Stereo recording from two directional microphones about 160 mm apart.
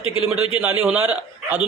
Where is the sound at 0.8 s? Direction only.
10° right (ahead or behind).